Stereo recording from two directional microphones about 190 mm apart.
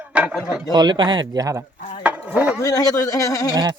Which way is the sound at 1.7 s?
40° left (ahead or behind).